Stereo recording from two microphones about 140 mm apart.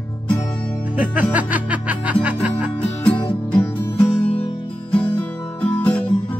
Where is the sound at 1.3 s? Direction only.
10° right (ahead or behind).